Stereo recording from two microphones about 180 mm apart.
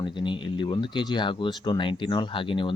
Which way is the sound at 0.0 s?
25° left (ahead or behind).